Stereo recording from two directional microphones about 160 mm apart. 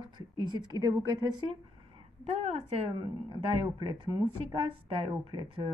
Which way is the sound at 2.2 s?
40° right (ahead or behind).